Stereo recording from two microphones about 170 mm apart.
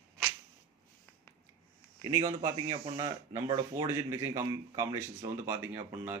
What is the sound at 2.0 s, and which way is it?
Speech, 20° right (ahead or behind).